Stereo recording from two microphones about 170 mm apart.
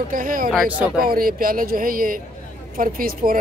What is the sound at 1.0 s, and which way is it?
Speech, 60° right (ahead or behind).